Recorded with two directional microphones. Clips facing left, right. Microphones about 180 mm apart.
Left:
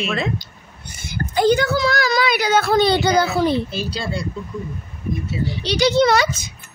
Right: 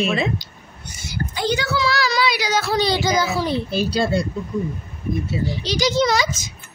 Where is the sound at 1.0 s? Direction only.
55° left (ahead or behind).